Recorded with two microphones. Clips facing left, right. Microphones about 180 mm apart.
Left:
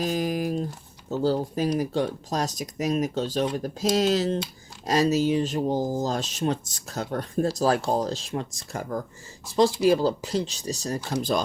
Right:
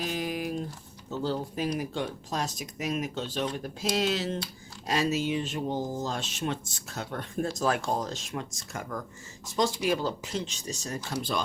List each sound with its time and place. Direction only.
0.0 s typing: 40° left (ahead or behind)
1.1 s speech: 40° left (ahead or behind)